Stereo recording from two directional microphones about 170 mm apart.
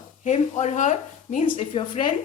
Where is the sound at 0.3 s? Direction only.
45° left (ahead or behind).